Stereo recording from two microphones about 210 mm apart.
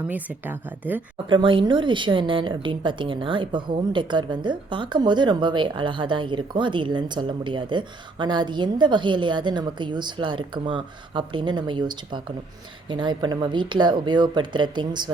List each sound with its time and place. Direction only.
0.1 s speech: 10° right (ahead or behind)
1.3 s speech: 25° right (ahead or behind)